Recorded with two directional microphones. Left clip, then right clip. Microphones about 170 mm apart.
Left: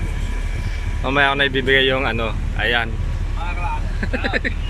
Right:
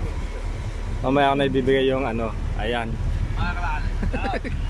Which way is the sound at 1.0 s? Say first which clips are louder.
Left 3 dB; 15° right (ahead or behind).